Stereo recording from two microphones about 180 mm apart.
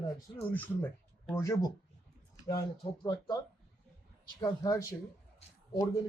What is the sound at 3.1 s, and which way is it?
Speech, 20° left (ahead or behind).